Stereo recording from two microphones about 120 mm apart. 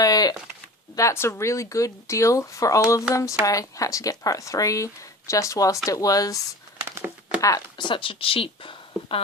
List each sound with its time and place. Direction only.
0.0 s a sound: 30° left (ahead or behind)
0.9 s speech: 25° left (ahead or behind)
6.9 s crumpling: 15° right (ahead or behind)
7.4 s speech: 35° left (ahead or behind)